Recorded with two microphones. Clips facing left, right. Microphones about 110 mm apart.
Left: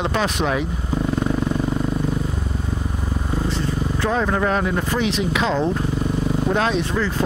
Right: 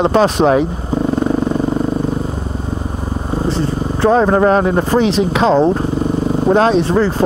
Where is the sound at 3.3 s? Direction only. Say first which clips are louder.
Right 7 dB; 30° right (ahead or behind).